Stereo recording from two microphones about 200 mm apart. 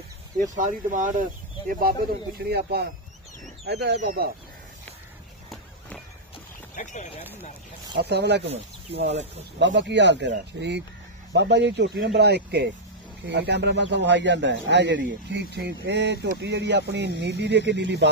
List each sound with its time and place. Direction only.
0.6 s speech: 40° right (ahead or behind); by 4.0 s 55° right (ahead or behind)
4.0 s speech: 45° right (ahead or behind)
6.7 s a sound: 40° left (ahead or behind)
7.9 s speech: 55° right (ahead or behind)
9.6 s speech: 65° right (ahead or behind)